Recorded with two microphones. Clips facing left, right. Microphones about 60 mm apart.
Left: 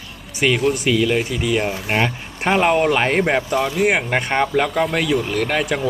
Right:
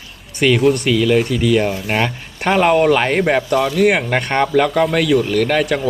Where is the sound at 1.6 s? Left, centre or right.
Centre.